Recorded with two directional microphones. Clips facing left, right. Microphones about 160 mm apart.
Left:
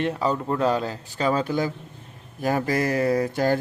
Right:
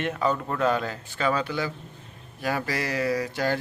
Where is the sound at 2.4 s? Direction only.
45° left (ahead or behind).